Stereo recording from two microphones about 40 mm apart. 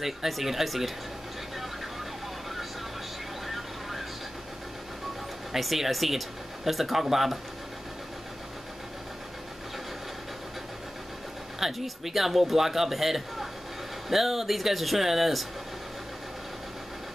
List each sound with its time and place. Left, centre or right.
0.0 s a man's voice: centre
3.4 s vehicle: centre
5.5 s a man's voice: centre
11.6 s a man's voice: centre